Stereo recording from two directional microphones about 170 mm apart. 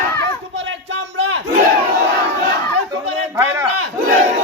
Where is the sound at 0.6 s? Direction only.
90° right.